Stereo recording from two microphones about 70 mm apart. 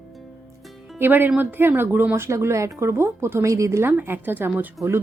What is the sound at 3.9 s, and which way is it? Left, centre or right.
Speech, right.